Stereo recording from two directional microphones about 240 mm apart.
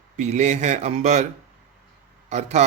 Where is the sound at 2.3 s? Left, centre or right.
Right.